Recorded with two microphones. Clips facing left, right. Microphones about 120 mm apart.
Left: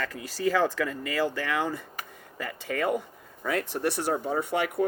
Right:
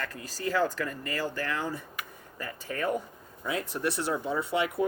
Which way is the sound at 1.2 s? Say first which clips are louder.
Left 5 dB; 90° left.